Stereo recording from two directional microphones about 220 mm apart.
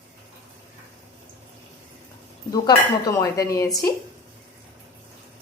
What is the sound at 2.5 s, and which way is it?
A woman's voice, 15° left (ahead or behind).